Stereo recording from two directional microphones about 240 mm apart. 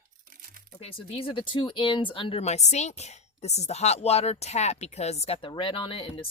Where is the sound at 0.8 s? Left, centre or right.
Left.